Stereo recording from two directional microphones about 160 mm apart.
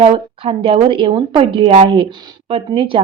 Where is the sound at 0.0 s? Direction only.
35° right (ahead or behind).